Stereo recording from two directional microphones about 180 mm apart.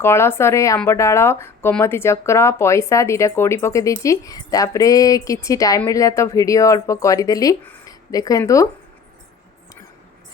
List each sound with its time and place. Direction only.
0.0 s speech: 15° left (ahead or behind)